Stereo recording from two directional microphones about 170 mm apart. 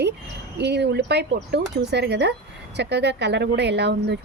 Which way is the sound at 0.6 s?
80° right.